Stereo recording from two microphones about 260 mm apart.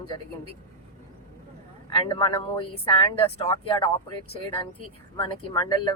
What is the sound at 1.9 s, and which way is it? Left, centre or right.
Speech, centre.